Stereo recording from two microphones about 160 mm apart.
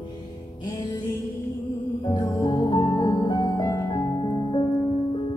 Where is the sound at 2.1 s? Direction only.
30° left (ahead or behind).